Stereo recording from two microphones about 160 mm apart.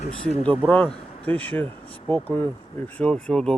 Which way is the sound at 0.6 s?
10° left (ahead or behind).